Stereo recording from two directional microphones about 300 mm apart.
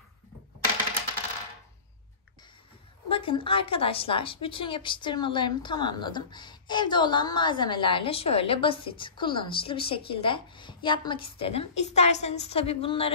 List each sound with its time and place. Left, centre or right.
3.1 s a woman's voice: centre